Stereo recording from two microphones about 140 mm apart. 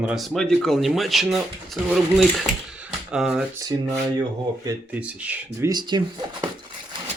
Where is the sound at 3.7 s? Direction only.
30° right (ahead or behind).